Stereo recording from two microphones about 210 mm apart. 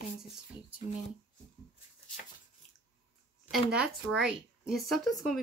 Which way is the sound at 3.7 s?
5° right (ahead or behind).